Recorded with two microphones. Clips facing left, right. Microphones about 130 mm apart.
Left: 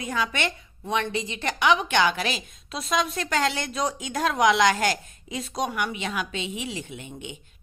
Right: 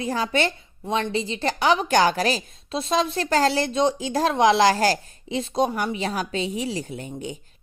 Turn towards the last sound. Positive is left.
turn(degrees=-40)  # may be behind; listen again after turning